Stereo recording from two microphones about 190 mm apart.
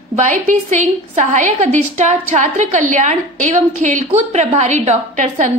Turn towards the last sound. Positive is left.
turn(degrees=-40)  # may be behind; listen again after turning